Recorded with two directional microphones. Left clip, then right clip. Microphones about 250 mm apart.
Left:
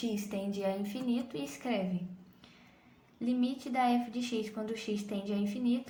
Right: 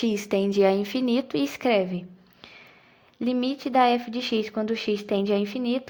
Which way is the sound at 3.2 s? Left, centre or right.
Right.